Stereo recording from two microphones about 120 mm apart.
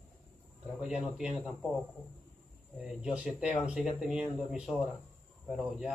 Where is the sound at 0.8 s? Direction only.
5° right (ahead or behind).